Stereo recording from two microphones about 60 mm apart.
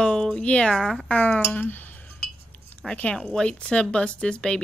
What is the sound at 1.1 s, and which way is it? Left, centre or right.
Speech, left.